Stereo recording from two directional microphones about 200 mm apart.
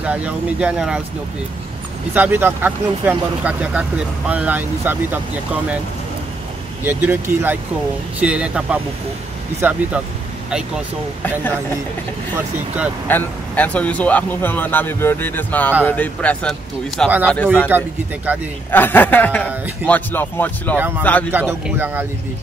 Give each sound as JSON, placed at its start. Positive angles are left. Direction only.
{"t": 0.0, "sound": "speech", "side_deg": -5}
{"t": 2.1, "sound": "speech", "side_deg": -10}
{"t": 6.8, "sound": "speech", "side_deg": -10}
{"t": 13.1, "sound": "speech", "side_deg": 10}
{"t": 17.6, "sound": "speech", "side_deg": -10}
{"t": 18.7, "sound": "speech", "side_deg": 10}
{"t": 20.7, "sound": "speech", "side_deg": -10}
{"t": 21.0, "sound": "speech", "side_deg": 10}
{"t": 21.3, "sound": "speech", "side_deg": -10}